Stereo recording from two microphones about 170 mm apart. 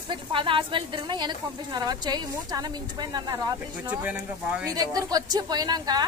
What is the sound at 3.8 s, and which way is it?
A woman's voice, 10° right (ahead or behind).